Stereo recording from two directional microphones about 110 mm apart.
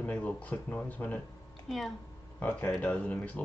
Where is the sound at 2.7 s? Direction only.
15° left (ahead or behind).